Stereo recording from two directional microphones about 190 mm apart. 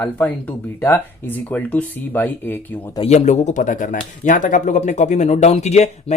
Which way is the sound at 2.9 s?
30° left (ahead or behind).